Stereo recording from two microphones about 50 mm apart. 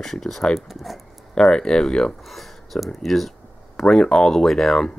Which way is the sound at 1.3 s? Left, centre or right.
Centre.